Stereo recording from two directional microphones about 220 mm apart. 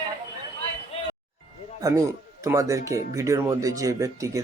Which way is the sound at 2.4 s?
15° right (ahead or behind).